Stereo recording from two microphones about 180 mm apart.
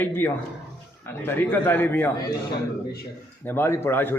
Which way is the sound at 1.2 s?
10° left (ahead or behind).